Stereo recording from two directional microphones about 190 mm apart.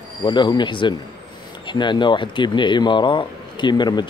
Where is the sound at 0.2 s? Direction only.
25° left (ahead or behind).